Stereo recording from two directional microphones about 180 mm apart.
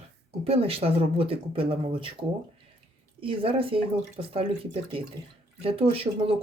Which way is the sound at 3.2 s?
30° right (ahead or behind).